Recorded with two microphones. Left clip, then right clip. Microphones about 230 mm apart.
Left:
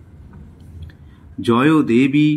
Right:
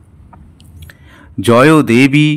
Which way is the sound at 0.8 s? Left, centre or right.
Right.